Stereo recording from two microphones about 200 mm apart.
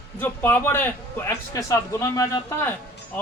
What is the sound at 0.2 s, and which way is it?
Speech, 10° left (ahead or behind).